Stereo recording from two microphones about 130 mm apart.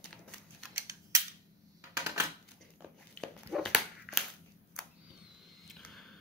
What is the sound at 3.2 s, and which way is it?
Dog, centre (ahead or behind).